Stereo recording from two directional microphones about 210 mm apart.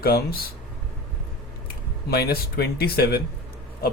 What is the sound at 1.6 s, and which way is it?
Speech, 50° left (ahead or behind).